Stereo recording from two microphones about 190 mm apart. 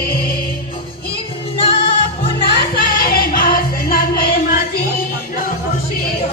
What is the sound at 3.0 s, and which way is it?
Music, 50° left (ahead or behind).